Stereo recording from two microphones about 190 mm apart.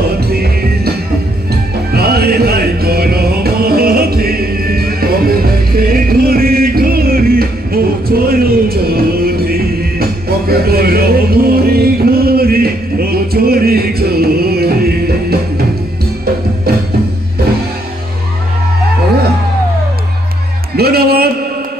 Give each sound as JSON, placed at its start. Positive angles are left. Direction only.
{"t": 0.0, "sound": "music", "side_deg": -55}
{"t": 20.7, "sound": "music", "side_deg": -55}